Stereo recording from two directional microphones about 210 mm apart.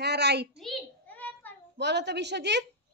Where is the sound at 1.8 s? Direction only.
55° right (ahead or behind).